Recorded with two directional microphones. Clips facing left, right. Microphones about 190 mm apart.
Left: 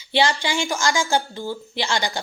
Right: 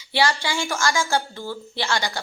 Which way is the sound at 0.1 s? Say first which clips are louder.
Left 2 dB; 20° left (ahead or behind).